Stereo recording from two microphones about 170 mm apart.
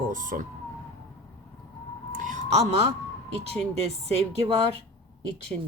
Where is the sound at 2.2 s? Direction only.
45° right (ahead or behind).